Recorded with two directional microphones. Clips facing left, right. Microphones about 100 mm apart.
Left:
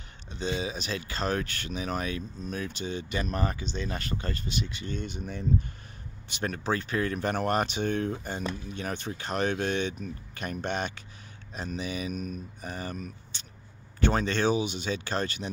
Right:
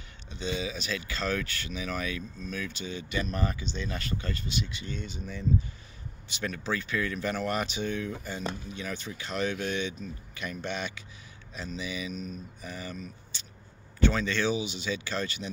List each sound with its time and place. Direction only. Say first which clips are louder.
0.3 s speech: left 2 dB; 40° left (ahead or behind)